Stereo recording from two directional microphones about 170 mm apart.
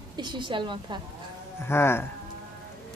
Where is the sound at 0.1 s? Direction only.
25° right (ahead or behind).